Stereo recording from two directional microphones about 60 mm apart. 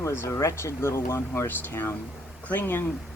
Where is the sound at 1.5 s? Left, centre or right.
Left.